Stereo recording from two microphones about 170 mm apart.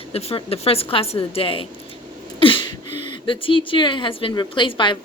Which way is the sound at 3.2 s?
30° left (ahead or behind).